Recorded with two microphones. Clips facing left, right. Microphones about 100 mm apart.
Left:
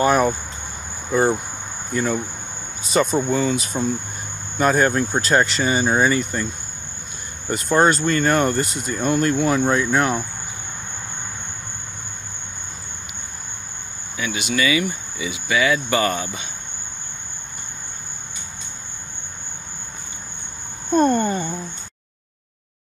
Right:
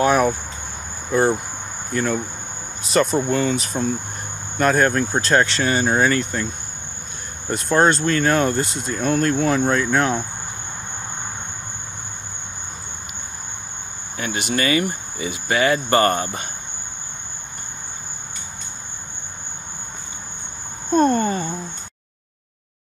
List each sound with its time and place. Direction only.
0.0 s speech: centre (ahead or behind)
7.4 s speech: centre (ahead or behind)
14.1 s speech: 45° right (ahead or behind)
20.9 s a sound: centre (ahead or behind)